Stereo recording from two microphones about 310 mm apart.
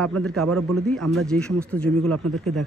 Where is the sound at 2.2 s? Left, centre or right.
Right.